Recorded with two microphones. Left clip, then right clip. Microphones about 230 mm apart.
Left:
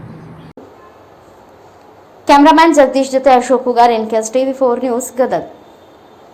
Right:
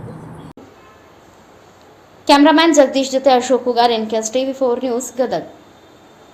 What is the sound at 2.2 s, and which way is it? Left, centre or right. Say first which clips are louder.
A woman's voice: left 4 dB; centre.